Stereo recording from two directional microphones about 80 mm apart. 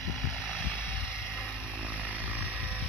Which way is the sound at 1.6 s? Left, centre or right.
Centre.